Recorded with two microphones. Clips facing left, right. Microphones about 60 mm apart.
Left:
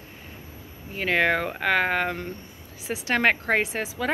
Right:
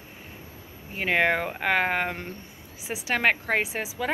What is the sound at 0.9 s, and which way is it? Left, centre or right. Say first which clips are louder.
Speech: left 1 dB; centre.